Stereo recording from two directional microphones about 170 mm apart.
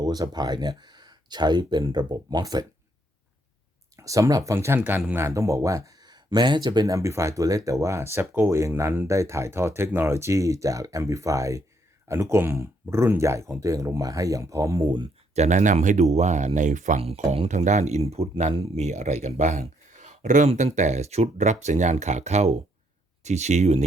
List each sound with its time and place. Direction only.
0.0 s speech: 25° right (ahead or behind)
3.9 s speech: 20° right (ahead or behind)
15.4 s speech: 45° right (ahead or behind)
17.3 s speech: 40° right (ahead or behind)